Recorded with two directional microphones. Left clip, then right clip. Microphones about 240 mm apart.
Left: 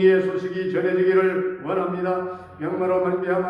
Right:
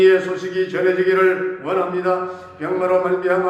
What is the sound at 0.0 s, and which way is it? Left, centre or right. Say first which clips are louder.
Speech: right 4 dB; right.